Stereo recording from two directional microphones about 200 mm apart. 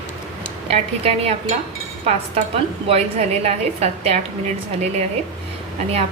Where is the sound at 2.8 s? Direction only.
30° right (ahead or behind).